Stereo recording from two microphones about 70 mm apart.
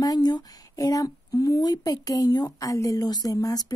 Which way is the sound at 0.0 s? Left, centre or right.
Left.